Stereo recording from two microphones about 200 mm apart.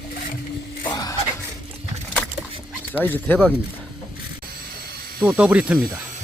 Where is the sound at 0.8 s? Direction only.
20° left (ahead or behind).